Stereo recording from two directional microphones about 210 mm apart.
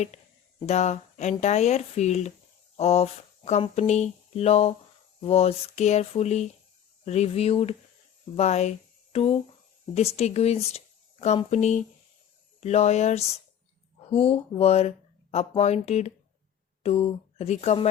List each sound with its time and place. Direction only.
0.6 s speech: 30° left (ahead or behind)